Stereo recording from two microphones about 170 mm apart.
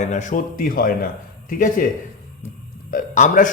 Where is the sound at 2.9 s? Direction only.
50° left (ahead or behind).